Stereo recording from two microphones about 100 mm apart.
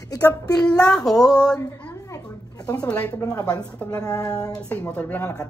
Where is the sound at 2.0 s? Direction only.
35° left (ahead or behind).